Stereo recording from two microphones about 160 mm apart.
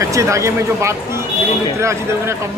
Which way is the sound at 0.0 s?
20° right (ahead or behind).